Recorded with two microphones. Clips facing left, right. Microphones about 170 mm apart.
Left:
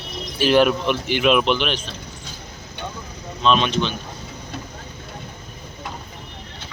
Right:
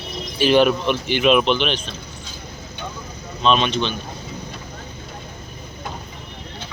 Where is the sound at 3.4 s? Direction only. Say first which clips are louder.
Even; centre (ahead or behind).